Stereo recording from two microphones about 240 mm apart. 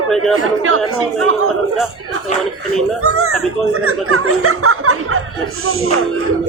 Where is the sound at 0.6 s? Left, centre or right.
Right.